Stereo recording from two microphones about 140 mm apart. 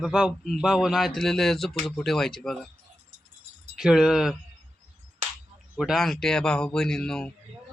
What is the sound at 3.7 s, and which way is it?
Speech, 5° right (ahead or behind).